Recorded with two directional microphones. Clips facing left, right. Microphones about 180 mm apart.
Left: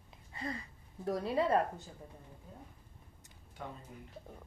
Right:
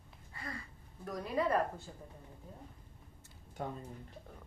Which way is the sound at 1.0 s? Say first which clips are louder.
Left 2 dB; 30° left (ahead or behind).